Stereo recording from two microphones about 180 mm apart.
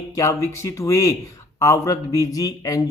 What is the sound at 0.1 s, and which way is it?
Speech, 15° left (ahead or behind).